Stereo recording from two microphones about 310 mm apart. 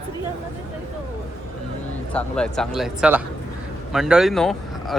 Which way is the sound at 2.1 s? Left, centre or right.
Centre.